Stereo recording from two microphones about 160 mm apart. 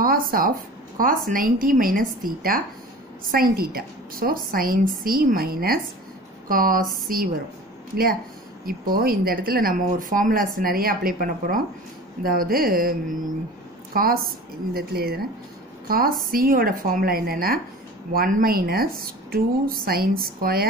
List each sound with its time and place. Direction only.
0.0 s a woman's voice: 65° right (ahead or behind)
13.9 s a woman's voice: 70° right (ahead or behind)
16.3 s a woman's voice: 65° right (ahead or behind)